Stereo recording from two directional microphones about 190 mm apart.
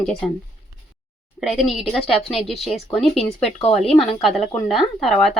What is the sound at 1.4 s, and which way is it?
Speech, centre (ahead or behind).